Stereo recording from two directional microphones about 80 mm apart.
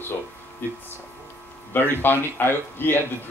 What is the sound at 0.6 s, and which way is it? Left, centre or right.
Speech, left.